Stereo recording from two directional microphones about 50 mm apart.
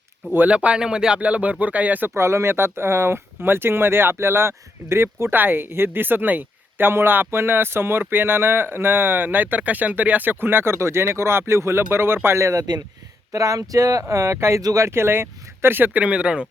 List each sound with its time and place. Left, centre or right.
0.5 s speech: right
2.0 s speech: right
5.3 s speech: right
13.3 s speech: right
14.1 s speech: right
15.9 s speech: right